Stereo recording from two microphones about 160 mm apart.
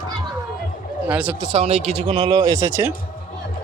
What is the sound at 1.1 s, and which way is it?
Speech, 10° right (ahead or behind).